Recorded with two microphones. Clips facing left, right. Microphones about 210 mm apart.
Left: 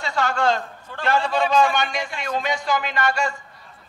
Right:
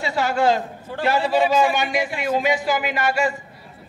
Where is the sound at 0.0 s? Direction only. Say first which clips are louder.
Right 2 dB; 5° right (ahead or behind).